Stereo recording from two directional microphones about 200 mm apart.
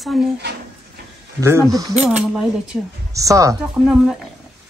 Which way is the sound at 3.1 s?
15° right (ahead or behind).